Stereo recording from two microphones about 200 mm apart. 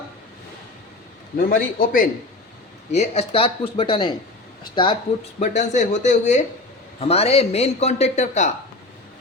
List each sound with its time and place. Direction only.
1.4 s a man's voice: 45° left (ahead or behind)
2.9 s speech: 30° left (ahead or behind)
5.4 s a man's voice: 35° left (ahead or behind)